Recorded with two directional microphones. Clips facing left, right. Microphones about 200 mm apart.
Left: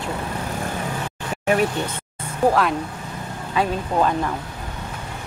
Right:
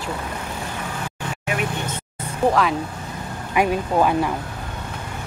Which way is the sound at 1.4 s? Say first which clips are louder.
Left 6 dB; 35° left (ahead or behind).